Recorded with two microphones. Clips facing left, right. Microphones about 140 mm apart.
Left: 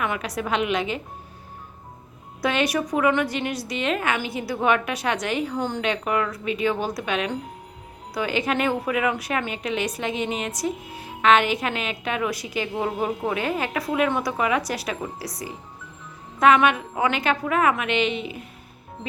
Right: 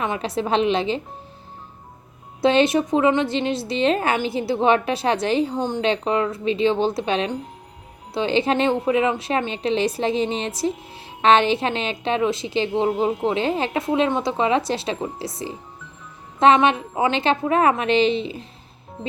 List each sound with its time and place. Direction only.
0.0 s a woman's voice: 25° right (ahead or behind)
2.4 s a woman's voice: 25° right (ahead or behind)